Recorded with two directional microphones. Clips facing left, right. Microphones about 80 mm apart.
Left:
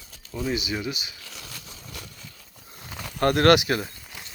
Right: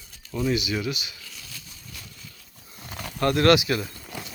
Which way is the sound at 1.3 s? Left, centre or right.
Left.